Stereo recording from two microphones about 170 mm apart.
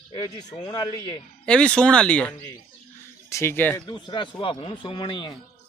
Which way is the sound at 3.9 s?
25° left (ahead or behind).